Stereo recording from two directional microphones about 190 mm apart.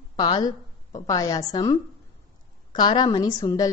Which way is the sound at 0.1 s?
25° left (ahead or behind).